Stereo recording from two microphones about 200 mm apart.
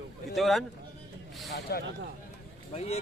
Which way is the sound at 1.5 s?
55° left (ahead or behind).